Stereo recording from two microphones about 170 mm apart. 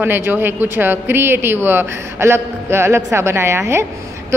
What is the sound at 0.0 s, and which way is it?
A woman's voice, 10° right (ahead or behind).